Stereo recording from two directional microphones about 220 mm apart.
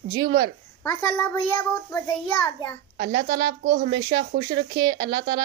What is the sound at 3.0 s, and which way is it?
Speech, 45° right (ahead or behind).